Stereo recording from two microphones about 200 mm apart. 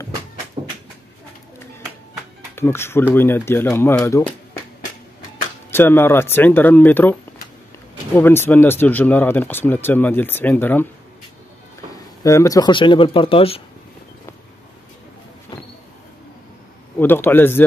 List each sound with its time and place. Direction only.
0.6 s cupboard open or close: 30° right (ahead or behind)
2.5 s speech: 10° left (ahead or behind)
5.7 s speech: 10° left (ahead or behind)
8.2 s speech: 10° left (ahead or behind)
12.2 s speech: 15° left (ahead or behind)
17.0 s speech: 10° left (ahead or behind)